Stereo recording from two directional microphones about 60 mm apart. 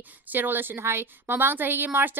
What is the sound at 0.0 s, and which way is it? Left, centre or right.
A woman's voice, right.